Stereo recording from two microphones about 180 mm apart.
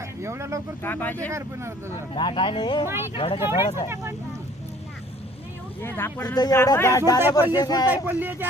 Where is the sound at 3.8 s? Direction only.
15° right (ahead or behind).